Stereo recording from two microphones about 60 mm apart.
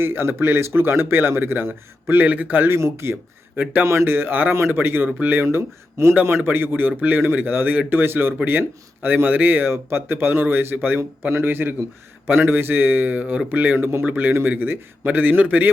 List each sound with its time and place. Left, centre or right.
0.0 s speech: right
2.6 s speech: right
3.5 s a man's voice: right
3.8 s speech: right
11.3 s a man's voice: right
13.7 s speech: right
14.1 s a man's voice: right